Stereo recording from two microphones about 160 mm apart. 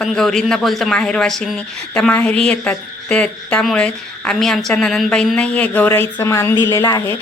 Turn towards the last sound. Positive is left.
turn(degrees=20)  # may be behind; listen again after turning